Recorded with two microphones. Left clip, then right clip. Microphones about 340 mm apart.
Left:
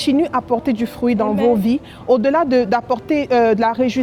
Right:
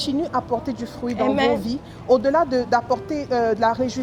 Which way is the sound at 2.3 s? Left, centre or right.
Left.